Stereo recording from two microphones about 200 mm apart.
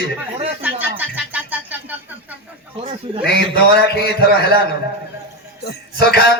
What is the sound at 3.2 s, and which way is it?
A man's voice, 55° left (ahead or behind).